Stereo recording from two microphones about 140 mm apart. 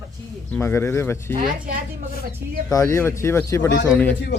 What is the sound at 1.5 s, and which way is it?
Speech, 85° right.